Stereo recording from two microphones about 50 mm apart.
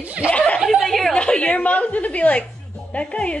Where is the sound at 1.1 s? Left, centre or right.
Left.